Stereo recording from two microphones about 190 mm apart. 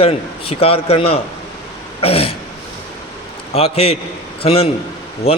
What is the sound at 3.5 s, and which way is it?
A man's voice, 30° left (ahead or behind).